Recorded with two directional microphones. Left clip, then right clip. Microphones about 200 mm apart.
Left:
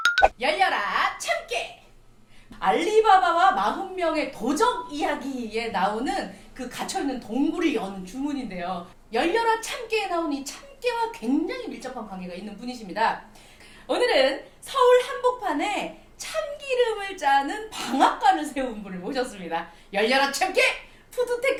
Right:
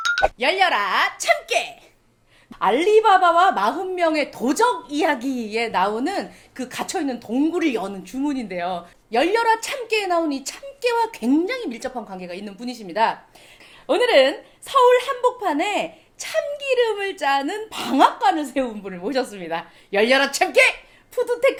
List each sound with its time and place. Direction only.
0.3 s a woman's voice: 50° right (ahead or behind)